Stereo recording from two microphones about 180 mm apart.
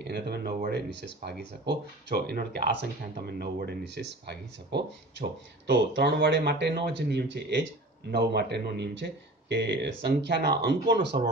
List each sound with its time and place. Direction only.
0.0 s speech: 65° right (ahead or behind)
8.1 s speech: 65° right (ahead or behind)